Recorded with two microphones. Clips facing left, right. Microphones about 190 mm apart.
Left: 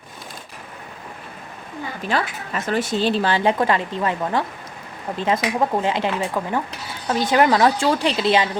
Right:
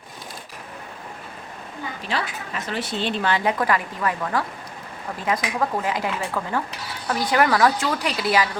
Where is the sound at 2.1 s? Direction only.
50° left (ahead or behind).